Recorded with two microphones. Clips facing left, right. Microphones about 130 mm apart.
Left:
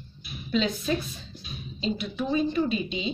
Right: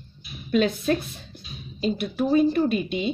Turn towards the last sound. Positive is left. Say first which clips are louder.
# right 4 dB
turn(degrees=-55)  # may be behind; listen again after turning